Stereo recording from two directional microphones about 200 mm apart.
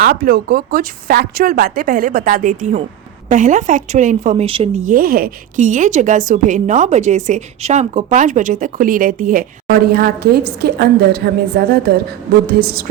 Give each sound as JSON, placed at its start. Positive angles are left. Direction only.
{"t": 0.0, "sound": "speech", "side_deg": -45}